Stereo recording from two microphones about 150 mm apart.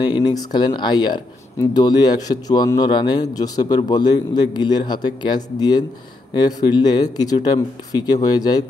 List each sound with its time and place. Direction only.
0.0 s speech: 30° left (ahead or behind)